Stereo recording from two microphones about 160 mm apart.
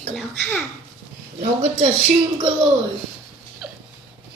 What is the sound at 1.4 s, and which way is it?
Speech, 40° right (ahead or behind).